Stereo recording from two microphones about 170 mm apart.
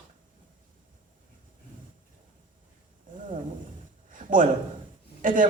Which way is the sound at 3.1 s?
50° right (ahead or behind).